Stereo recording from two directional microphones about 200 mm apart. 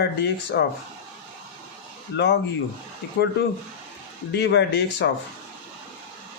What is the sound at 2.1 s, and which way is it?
Speech, 60° left (ahead or behind).